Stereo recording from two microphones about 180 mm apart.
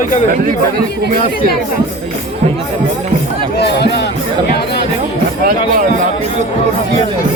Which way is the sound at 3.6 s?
65° left (ahead or behind).